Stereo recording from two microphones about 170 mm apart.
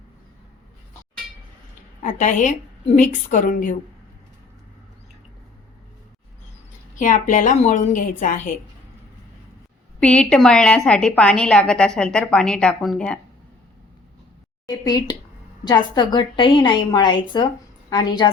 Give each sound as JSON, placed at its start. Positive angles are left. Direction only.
{"t": 2.0, "sound": "a woman's voice", "side_deg": 50}
{"t": 7.0, "sound": "a woman's voice", "side_deg": 50}
{"t": 10.0, "sound": "a woman's voice", "side_deg": 5}
{"t": 14.7, "sound": "a woman's voice", "side_deg": 25}